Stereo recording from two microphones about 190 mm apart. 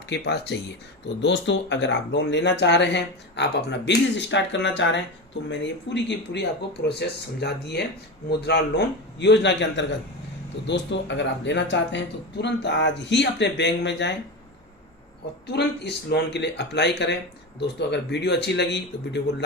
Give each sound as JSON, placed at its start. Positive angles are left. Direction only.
{"t": 0.1, "sound": "speech", "side_deg": 60}
{"t": 15.5, "sound": "speech", "side_deg": 65}